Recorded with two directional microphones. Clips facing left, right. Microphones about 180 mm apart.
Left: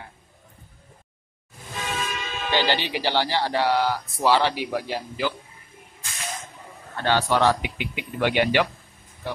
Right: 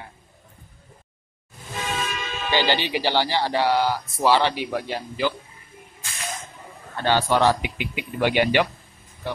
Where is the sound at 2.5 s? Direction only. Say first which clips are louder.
Right 1 dB; centre (ahead or behind).